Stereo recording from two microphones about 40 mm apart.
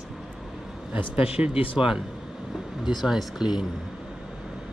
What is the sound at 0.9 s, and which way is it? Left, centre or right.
Speech, right.